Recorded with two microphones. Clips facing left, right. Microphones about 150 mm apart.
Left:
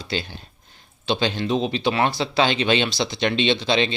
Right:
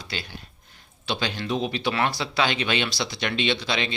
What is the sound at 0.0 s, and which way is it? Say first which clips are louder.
Speech: left 7 dB; 25° left (ahead or behind).